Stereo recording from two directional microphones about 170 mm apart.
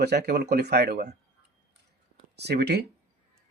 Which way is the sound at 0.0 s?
75° right (ahead or behind).